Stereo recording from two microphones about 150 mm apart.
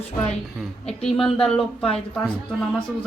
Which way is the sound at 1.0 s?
5° left (ahead or behind).